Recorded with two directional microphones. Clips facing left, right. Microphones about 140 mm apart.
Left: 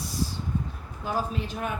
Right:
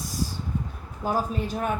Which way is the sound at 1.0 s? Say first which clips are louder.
Right 3 dB; 45° right (ahead or behind).